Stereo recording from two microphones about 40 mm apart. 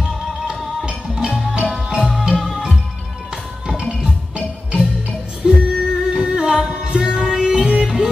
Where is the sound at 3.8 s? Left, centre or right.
Centre.